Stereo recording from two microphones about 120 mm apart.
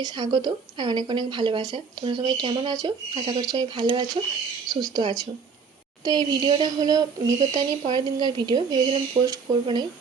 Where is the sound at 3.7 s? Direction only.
45° right (ahead or behind).